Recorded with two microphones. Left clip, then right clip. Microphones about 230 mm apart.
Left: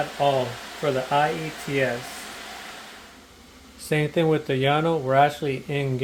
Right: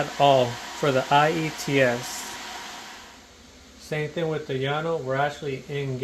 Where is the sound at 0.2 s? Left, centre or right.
Right.